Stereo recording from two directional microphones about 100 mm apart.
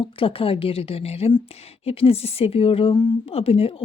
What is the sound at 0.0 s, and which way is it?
Speech, 65° left (ahead or behind).